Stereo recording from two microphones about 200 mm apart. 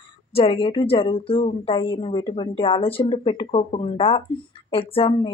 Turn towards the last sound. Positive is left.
turn(degrees=25)  # may be behind; listen again after turning